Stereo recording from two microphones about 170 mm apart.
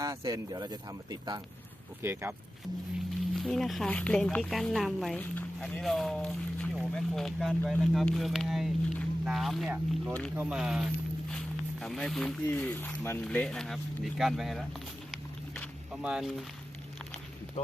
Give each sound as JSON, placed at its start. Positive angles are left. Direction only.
{"t": 0.0, "sound": "speech", "side_deg": -20}
{"t": 2.0, "sound": "speech", "side_deg": -15}
{"t": 3.3, "sound": "speech", "side_deg": 0}
{"t": 15.1, "sound": "vehicle", "side_deg": 0}
{"t": 16.0, "sound": "speech", "side_deg": 0}